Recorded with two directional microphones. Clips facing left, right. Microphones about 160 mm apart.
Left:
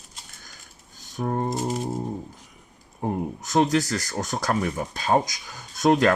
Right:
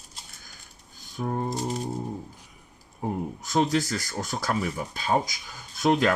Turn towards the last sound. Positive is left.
turn(degrees=45)  # may be behind; listen again after turning